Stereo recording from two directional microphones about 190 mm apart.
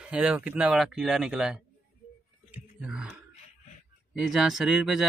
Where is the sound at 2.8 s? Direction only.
5° right (ahead or behind).